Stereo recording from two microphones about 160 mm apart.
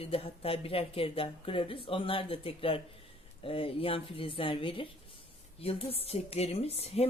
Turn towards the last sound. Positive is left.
turn(degrees=40)  # may be behind; listen again after turning